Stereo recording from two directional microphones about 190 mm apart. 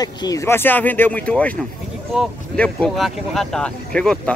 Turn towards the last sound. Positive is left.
turn(degrees=5)  # may be behind; listen again after turning